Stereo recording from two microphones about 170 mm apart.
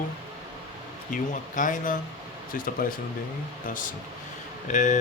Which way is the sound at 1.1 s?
50° left (ahead or behind).